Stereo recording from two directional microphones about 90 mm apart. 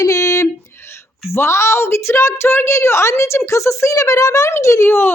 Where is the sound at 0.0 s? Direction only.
35° left (ahead or behind).